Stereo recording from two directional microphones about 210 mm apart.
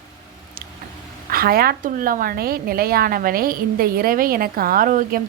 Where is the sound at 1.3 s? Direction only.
45° right (ahead or behind).